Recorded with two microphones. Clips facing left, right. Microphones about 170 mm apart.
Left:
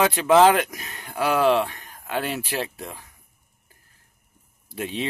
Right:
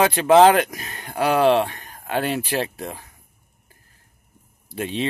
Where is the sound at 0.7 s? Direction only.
60° right (ahead or behind).